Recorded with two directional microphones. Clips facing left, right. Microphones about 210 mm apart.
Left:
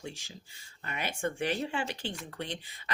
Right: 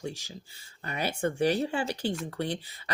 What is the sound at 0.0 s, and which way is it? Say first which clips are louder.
Speech: right 6 dB; 40° right (ahead or behind).